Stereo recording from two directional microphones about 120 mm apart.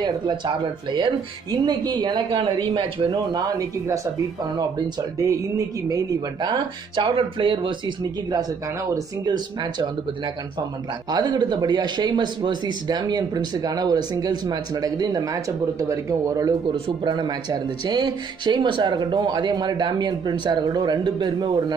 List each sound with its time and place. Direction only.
0.9 s a man's voice: 35° right (ahead or behind)
2.7 s speech: 50° right (ahead or behind)
3.1 s a man's voice: 30° right (ahead or behind)